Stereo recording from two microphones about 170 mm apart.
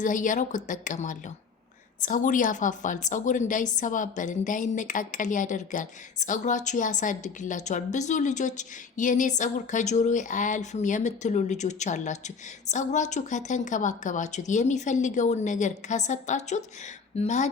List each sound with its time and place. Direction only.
0.0 s a woman's voice: 50° left (ahead or behind)